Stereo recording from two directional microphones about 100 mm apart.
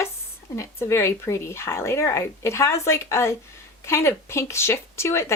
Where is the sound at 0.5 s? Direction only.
30° left (ahead or behind).